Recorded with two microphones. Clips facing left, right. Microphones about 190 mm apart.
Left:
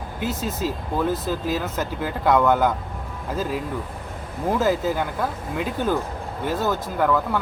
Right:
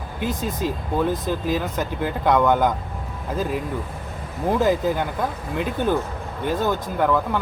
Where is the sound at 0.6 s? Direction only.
55° right (ahead or behind).